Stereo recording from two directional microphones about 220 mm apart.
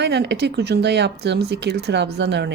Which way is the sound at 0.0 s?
50° right (ahead or behind).